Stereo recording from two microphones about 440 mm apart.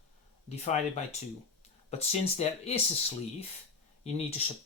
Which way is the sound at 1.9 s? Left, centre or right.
Centre.